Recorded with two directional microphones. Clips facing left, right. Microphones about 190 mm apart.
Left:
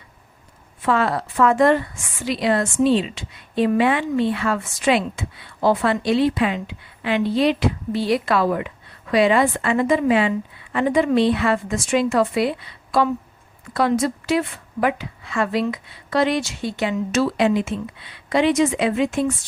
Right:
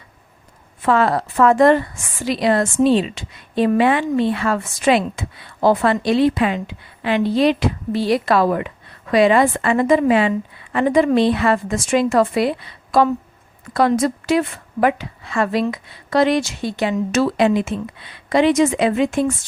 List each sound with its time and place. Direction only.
0.9 s a woman's voice: 45° right (ahead or behind)